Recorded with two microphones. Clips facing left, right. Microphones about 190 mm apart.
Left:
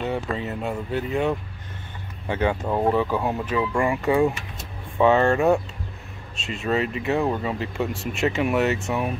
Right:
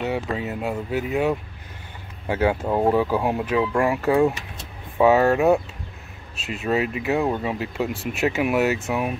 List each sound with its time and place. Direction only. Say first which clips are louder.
0.0 s speech: right 1 dB; 5° right (ahead or behind)